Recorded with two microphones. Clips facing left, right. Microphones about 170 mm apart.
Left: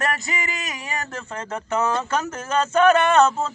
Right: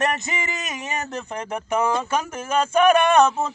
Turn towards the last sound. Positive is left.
turn(degrees=-15)  # may be behind; listen again after turning